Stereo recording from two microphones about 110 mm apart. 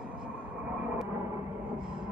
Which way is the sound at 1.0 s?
20° right (ahead or behind).